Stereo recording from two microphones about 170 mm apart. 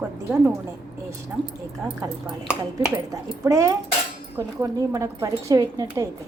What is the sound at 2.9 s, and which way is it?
A woman's voice, 20° right (ahead or behind).